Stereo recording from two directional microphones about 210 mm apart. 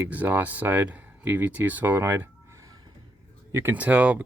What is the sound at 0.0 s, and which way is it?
Speech, 10° right (ahead or behind).